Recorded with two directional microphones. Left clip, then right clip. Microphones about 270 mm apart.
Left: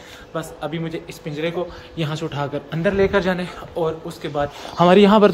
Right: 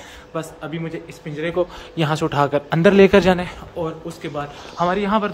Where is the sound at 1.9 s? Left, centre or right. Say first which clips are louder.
Right 7 dB; centre.